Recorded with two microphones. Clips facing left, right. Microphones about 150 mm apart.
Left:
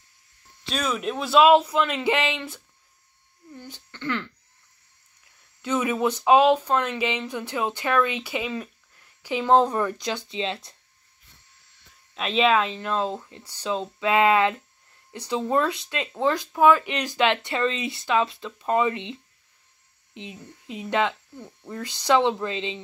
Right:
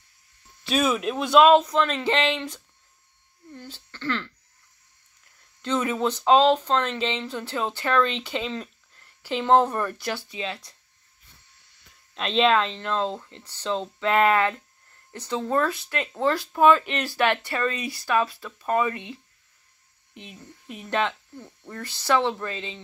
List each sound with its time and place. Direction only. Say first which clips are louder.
0.7 s speech: right 4 dB; 5° right (ahead or behind)
3.5 s speech: even; 15° left (ahead or behind)
5.6 s speech: left 1 dB; 10° left (ahead or behind)
12.1 s speech: even; 5° left (ahead or behind); by 19.1 s 20° left (ahead or behind)
20.2 s speech: left 4 dB; 20° left (ahead or behind)